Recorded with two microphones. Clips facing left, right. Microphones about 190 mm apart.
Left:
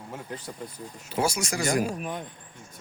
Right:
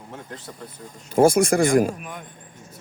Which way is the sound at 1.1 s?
50° right (ahead or behind).